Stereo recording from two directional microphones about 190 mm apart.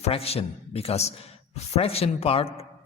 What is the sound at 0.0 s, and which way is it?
A man's voice, 30° left (ahead or behind).